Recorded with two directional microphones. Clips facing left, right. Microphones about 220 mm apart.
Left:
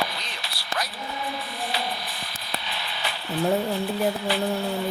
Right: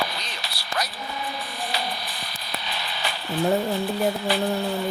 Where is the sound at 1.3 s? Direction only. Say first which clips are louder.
Even; 40° right (ahead or behind).